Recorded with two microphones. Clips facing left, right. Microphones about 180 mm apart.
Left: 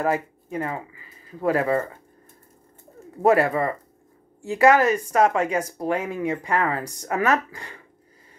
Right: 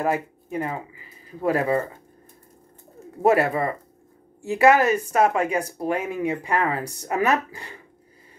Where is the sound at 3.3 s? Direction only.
20° right (ahead or behind).